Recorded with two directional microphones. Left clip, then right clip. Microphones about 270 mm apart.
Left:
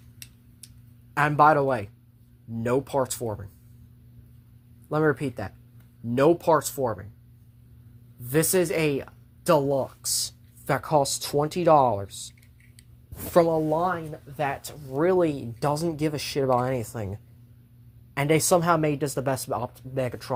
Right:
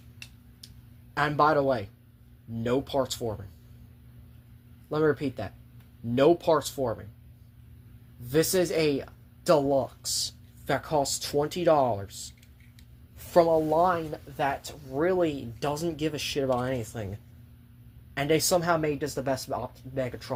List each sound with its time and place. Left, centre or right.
1.1 s speech: left
4.9 s speech: left
8.3 s speech: left